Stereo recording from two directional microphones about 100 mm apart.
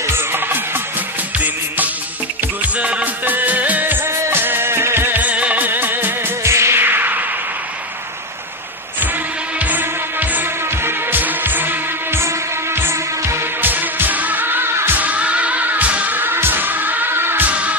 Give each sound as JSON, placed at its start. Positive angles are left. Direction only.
{"t": 0.0, "sound": "music", "side_deg": -20}
{"t": 2.6, "sound": "music", "side_deg": -15}
{"t": 9.6, "sound": "music", "side_deg": -15}